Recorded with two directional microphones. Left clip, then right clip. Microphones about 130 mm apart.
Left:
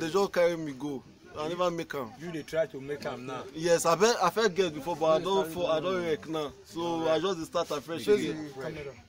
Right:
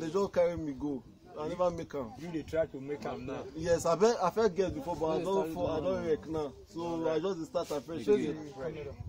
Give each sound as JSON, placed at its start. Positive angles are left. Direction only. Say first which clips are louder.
{"t": 0.0, "sound": "speech", "louder": "left 4 dB", "side_deg": 20}
{"t": 3.5, "sound": "speech", "louder": "left 4 dB", "side_deg": 15}